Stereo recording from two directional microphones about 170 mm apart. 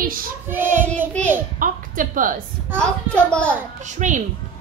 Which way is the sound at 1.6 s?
50° right (ahead or behind).